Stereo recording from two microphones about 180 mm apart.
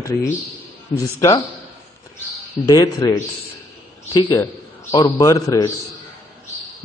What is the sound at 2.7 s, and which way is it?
A man's voice, 20° left (ahead or behind).